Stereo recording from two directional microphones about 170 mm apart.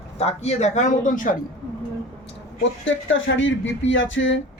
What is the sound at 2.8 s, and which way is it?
Speech, 90° left.